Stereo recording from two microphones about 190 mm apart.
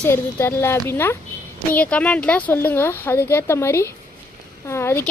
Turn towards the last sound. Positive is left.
turn(degrees=15)  # may be behind; listen again after turning